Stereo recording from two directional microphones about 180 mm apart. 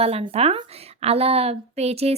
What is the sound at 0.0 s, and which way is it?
A woman's voice, 35° right (ahead or behind).